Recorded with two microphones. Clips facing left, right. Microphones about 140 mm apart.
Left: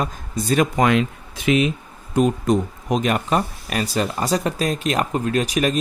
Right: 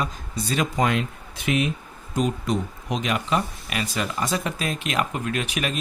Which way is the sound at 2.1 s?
45° left (ahead or behind).